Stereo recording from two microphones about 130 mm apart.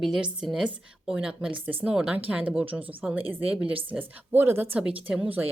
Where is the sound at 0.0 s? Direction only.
5° right (ahead or behind).